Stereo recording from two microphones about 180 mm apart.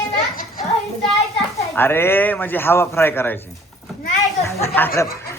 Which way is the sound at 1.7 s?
10° left (ahead or behind).